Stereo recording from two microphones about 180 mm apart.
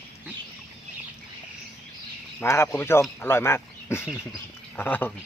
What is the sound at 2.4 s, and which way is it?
Speech, 15° left (ahead or behind).